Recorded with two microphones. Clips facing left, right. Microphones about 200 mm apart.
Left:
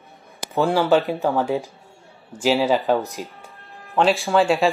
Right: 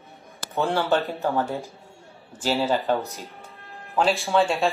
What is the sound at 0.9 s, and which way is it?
Speech, 10° left (ahead or behind).